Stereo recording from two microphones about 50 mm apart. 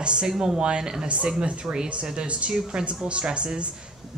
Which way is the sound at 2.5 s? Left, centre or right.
Centre.